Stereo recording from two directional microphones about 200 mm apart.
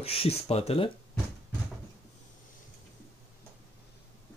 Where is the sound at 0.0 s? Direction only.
30° left (ahead or behind).